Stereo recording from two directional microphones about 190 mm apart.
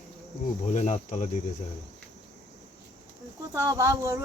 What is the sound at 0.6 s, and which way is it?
Cricket, 35° left (ahead or behind).